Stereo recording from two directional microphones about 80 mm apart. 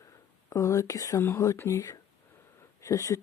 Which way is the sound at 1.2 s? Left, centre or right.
Left.